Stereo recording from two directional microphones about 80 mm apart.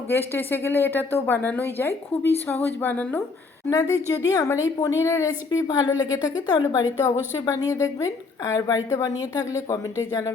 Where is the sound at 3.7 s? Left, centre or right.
Left.